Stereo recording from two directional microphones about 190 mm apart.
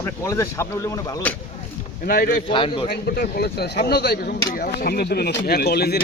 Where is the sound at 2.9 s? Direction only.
55° left (ahead or behind).